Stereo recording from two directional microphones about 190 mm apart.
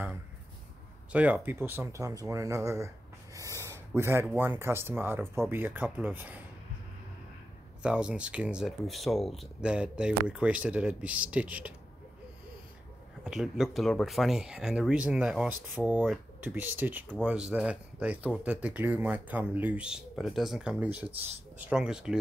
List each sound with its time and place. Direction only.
1.1 s speech: 10° right (ahead or behind)
7.8 s speech: 5° right (ahead or behind)
13.2 s speech: 5° right (ahead or behind)